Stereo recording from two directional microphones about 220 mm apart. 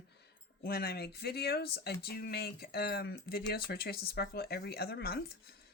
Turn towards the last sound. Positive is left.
turn(degrees=45)  # may be behind; listen again after turning